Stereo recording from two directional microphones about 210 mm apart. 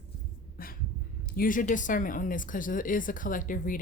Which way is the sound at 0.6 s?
45° left (ahead or behind).